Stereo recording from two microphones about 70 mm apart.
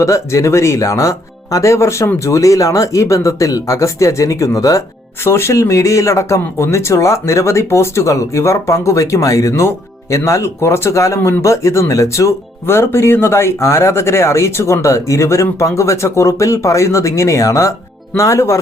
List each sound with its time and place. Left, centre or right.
0.0 s speech: left
5.2 s speech: left